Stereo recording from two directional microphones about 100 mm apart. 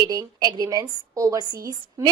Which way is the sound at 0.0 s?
40° right (ahead or behind).